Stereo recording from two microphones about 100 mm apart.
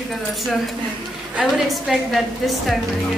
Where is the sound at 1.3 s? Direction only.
5° right (ahead or behind).